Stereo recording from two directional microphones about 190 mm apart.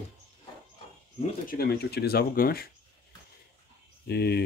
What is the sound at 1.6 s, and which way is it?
Speech, 55° left (ahead or behind).